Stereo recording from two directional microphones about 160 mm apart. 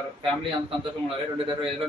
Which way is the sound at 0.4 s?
35° right (ahead or behind).